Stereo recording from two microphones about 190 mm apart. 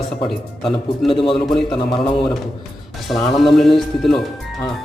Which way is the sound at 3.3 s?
Centre (ahead or behind).